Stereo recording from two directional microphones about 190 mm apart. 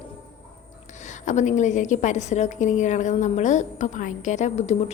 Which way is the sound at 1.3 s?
40° left (ahead or behind).